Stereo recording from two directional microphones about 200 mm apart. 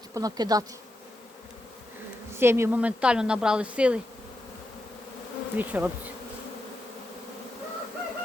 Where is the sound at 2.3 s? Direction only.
10° right (ahead or behind).